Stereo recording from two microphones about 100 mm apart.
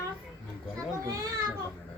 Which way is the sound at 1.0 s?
35° right (ahead or behind).